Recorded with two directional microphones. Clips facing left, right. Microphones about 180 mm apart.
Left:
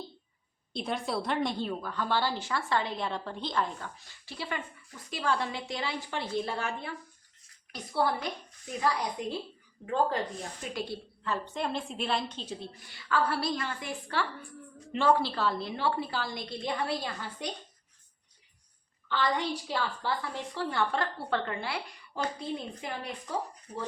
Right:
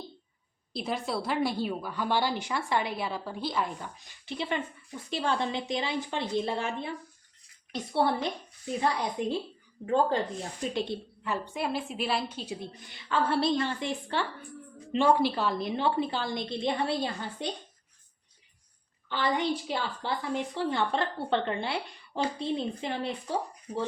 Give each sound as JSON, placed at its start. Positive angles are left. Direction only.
{"t": 0.7, "sound": "a woman's voice", "side_deg": 0}
{"t": 10.8, "sound": "a woman's voice", "side_deg": -20}
{"t": 19.0, "sound": "a woman's voice", "side_deg": -20}